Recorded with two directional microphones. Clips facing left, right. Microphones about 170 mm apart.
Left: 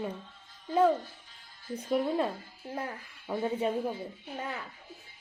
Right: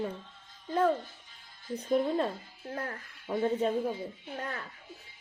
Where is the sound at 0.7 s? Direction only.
10° left (ahead or behind).